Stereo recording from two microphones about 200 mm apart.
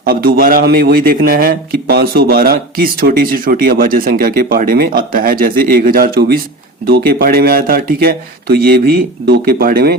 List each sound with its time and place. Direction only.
0.0 s a man's voice: 45° right (ahead or behind)